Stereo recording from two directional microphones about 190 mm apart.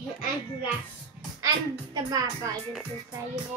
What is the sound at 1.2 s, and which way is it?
Music, 5° right (ahead or behind).